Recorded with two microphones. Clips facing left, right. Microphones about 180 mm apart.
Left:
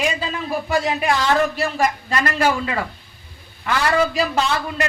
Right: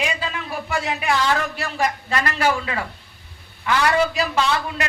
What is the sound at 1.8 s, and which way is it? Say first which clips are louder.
Speech: even; 45° left (ahead or behind).